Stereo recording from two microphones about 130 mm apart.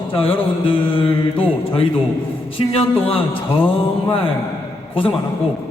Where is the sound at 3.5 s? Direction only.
15° left (ahead or behind).